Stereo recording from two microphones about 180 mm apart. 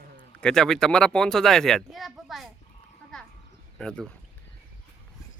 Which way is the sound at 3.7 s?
5° left (ahead or behind).